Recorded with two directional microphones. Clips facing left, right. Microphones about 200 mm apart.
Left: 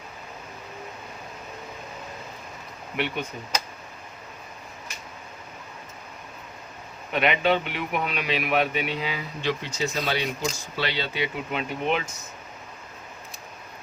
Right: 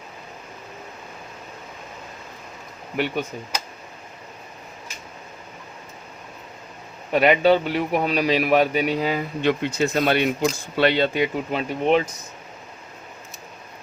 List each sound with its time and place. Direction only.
7.1 s a man's voice: 35° right (ahead or behind)